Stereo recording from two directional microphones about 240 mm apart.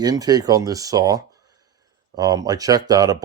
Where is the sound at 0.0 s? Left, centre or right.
Centre.